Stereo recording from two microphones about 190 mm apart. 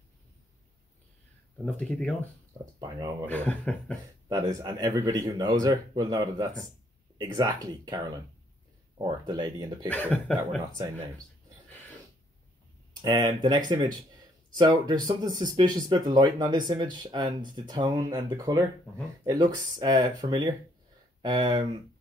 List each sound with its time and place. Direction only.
1.7 s speech: 5° left (ahead or behind)
2.6 s speech: 20° right (ahead or behind)
3.3 s speech: 5° left (ahead or behind)
4.3 s speech: 20° right (ahead or behind)
9.8 s speech: 10° left (ahead or behind)
10.7 s speech: 20° right (ahead or behind)
13.0 s speech: 20° right (ahead or behind)